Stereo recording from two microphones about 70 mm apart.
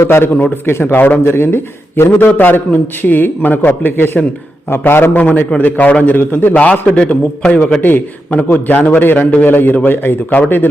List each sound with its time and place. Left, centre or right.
0.1 s a man's voice: left